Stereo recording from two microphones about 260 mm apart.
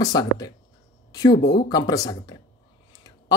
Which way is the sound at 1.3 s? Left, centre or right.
Left.